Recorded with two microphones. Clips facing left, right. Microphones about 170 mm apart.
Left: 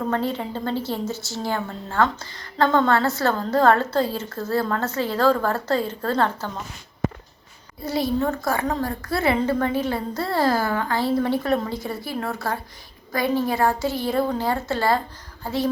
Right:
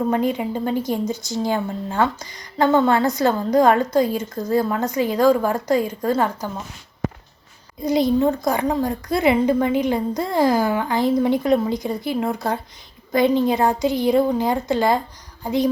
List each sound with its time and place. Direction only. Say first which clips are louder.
0.1 s a woman's voice: right 4 dB; 15° right (ahead or behind)
7.8 s a woman's voice: right 5 dB; 20° right (ahead or behind)